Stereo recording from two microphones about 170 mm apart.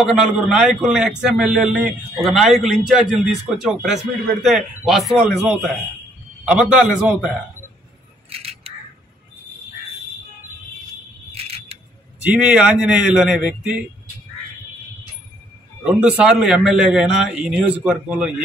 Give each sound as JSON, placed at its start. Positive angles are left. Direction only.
{"t": 0.0, "sound": "a man's voice", "side_deg": 0}
{"t": 6.4, "sound": "a man's voice", "side_deg": -5}
{"t": 8.3, "sound": "scissors", "side_deg": -35}
{"t": 11.3, "sound": "a sound", "side_deg": -35}
{"t": 12.2, "sound": "a man's voice", "side_deg": -5}
{"t": 15.8, "sound": "a man's voice", "side_deg": -5}